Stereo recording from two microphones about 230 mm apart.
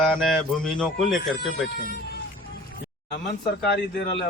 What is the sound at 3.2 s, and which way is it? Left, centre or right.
Speech, left.